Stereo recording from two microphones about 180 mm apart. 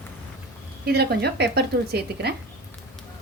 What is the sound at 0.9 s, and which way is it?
A woman's voice, 65° right (ahead or behind).